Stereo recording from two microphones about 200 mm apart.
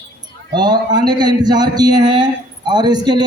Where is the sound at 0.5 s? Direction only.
20° right (ahead or behind).